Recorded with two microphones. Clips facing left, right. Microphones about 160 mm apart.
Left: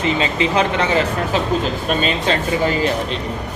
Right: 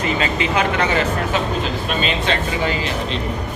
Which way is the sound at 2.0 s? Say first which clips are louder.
Even; 40° left (ahead or behind).